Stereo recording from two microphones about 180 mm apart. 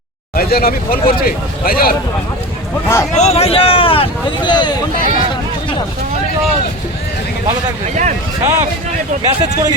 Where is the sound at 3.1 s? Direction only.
35° left (ahead or behind).